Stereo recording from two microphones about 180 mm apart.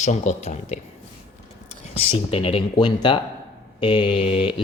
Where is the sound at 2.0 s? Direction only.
30° left (ahead or behind).